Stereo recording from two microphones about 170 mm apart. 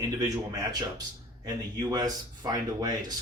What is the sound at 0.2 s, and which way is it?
Speech, 20° right (ahead or behind).